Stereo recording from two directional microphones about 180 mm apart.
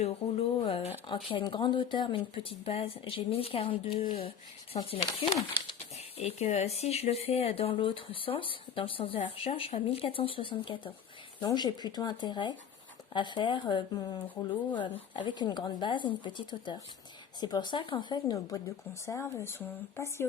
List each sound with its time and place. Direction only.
0.0 s speech: 30° left (ahead or behind); by 20.2 s 15° left (ahead or behind)